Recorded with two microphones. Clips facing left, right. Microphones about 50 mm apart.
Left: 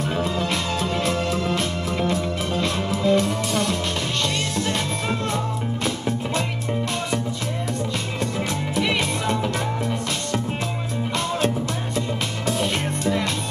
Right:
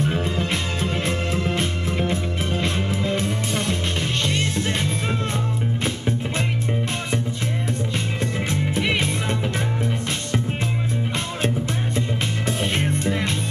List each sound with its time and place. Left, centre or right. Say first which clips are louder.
0.0 s music: even; right
5.9 s music: left 1 dB; right
8.2 s music: even; right
12.4 s music: left 1 dB; right